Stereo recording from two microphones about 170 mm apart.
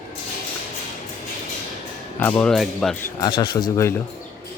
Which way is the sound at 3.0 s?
25° left (ahead or behind).